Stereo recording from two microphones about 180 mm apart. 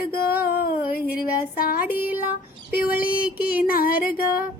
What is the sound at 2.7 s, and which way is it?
Music, 55° left (ahead or behind).